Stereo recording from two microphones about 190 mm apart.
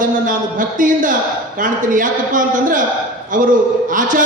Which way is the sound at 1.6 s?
45° right (ahead or behind).